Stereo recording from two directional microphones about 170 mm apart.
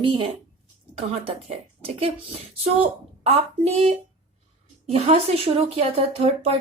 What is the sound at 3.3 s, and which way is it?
Speech, 35° right (ahead or behind).